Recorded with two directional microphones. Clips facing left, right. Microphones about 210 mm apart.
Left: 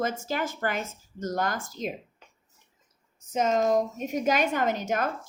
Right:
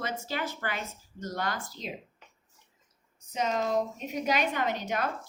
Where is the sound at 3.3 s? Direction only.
45° left (ahead or behind).